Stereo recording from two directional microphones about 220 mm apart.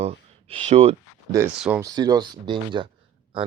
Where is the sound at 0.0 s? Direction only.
25° right (ahead or behind).